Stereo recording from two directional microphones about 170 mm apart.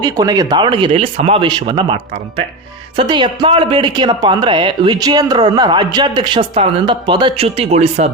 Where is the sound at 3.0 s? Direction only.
25° right (ahead or behind).